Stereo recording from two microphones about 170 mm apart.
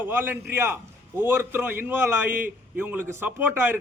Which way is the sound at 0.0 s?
10° right (ahead or behind).